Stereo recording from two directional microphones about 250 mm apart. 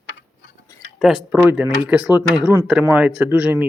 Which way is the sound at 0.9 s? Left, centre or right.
Centre.